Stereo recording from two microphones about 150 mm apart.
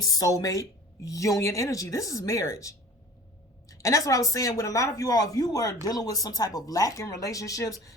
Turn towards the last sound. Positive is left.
turn(degrees=20)  # may be behind; listen again after turning